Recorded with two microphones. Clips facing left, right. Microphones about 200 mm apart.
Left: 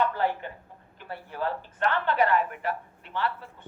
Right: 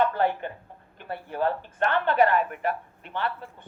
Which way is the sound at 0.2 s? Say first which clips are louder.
Right 3 dB; 55° right (ahead or behind).